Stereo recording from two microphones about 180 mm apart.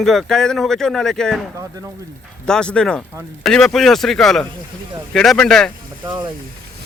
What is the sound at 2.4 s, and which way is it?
Speech, 5° left (ahead or behind).